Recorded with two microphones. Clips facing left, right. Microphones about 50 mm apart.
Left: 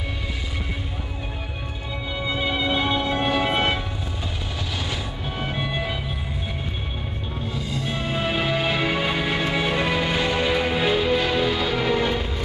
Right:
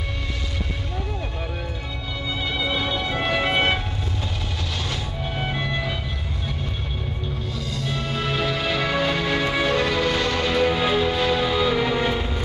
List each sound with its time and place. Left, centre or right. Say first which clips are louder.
2.2 s music: left 2 dB; centre
3.5 s music: right 1 dB; centre
7.5 s music: left 2 dB; centre